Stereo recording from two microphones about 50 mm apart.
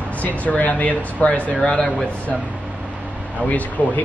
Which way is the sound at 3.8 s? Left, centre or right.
Left.